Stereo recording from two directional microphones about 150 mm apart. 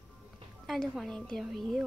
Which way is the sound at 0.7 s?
Centre (ahead or behind).